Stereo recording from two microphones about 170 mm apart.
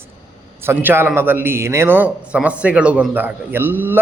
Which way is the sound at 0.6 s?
15° right (ahead or behind).